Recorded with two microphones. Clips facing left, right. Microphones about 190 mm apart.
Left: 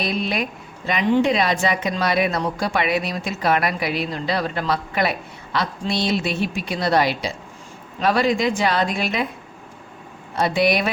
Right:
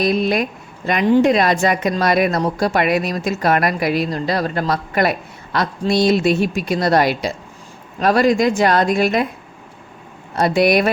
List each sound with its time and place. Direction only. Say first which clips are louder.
0.0 s speech: right 7 dB; 45° right (ahead or behind)
10.3 s speech: right 4 dB; 45° right (ahead or behind)